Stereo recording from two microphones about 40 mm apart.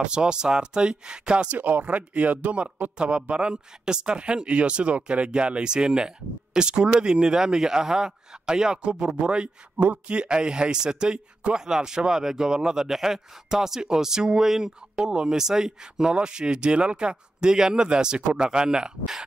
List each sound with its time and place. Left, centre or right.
0.0 s a man's voice: right
1.5 s a man's voice: right
9.8 s speech: right
10.1 s a man's voice: right